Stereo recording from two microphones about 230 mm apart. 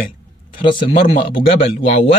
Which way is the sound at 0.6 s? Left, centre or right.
Left.